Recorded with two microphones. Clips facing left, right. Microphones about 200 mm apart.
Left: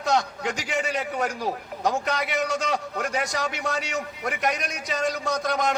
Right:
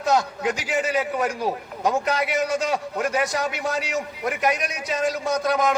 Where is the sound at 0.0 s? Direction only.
Centre (ahead or behind).